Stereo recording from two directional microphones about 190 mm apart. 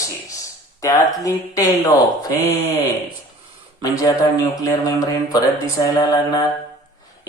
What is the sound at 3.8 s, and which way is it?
Mantra, 20° left (ahead or behind).